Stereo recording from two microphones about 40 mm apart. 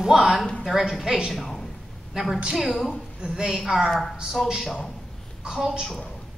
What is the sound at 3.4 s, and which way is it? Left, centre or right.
Speech, centre.